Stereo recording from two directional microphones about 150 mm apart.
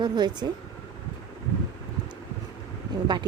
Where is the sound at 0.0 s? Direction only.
30° right (ahead or behind).